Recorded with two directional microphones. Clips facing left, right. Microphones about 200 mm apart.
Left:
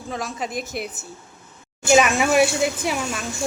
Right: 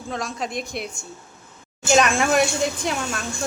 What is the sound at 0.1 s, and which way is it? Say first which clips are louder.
Speech: even; 5° left (ahead or behind).